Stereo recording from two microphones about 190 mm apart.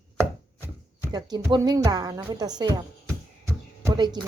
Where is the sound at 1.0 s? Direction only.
20° right (ahead or behind).